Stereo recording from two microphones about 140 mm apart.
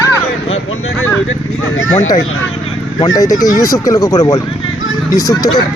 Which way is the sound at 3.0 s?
25° left (ahead or behind).